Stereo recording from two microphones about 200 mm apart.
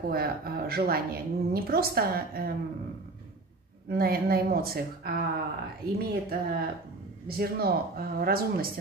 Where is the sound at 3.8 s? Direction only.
50° right (ahead or behind).